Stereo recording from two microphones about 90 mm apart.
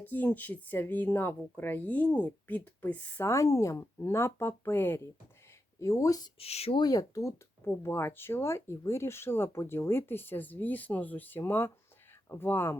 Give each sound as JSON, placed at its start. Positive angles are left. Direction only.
{"t": 0.0, "sound": "speech", "side_deg": 20}
{"t": 3.2, "sound": "speech", "side_deg": 35}
{"t": 5.8, "sound": "speech", "side_deg": 35}